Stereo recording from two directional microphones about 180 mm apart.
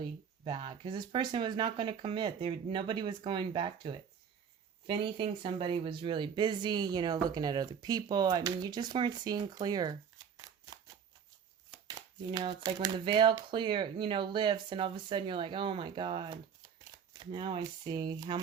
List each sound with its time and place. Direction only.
0.0 s speech: 25° right (ahead or behind)
12.4 s speech: 25° right (ahead or behind)